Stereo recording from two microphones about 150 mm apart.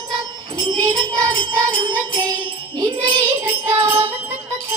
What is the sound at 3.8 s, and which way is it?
Music, 20° right (ahead or behind).